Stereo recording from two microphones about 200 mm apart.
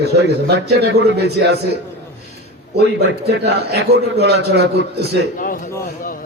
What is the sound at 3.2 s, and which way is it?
A man's voice, 55° right (ahead or behind).